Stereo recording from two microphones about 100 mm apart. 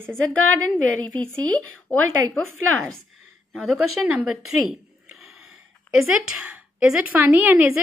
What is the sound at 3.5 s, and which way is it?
A woman's voice, 5° right (ahead or behind).